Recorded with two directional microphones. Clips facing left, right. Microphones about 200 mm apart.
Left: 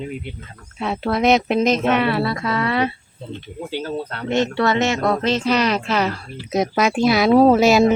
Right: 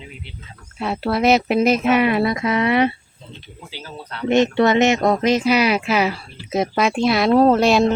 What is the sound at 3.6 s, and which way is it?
Speech, 55° left (ahead or behind).